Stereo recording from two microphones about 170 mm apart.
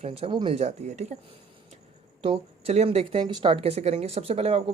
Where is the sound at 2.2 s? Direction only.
35° right (ahead or behind).